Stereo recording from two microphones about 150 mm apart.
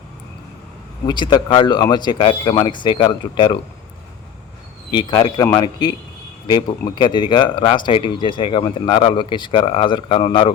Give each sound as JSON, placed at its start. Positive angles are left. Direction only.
{"t": 1.0, "sound": "speech", "side_deg": 30}
{"t": 4.9, "sound": "speech", "side_deg": 30}